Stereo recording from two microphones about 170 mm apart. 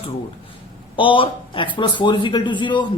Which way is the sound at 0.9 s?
30° left (ahead or behind).